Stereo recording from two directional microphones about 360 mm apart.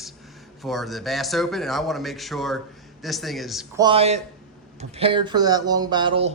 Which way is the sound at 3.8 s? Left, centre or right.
Centre.